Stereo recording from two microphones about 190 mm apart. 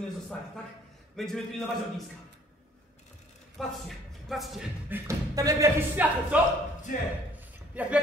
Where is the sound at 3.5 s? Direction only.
Centre (ahead or behind).